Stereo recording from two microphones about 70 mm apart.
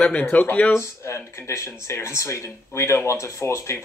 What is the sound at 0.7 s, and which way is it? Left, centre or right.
Speech, left.